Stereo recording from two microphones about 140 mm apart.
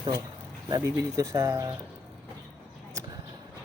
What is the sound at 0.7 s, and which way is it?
Speech, 25° right (ahead or behind).